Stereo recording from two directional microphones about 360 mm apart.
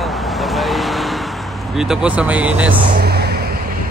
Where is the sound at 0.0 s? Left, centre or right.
Centre.